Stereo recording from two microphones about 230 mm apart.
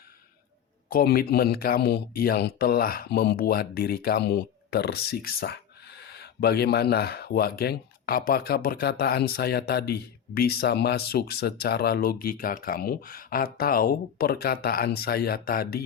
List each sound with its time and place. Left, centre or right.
0.9 s speech: left